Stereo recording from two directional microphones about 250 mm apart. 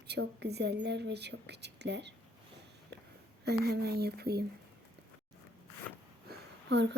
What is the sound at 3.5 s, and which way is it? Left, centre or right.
Speech, right.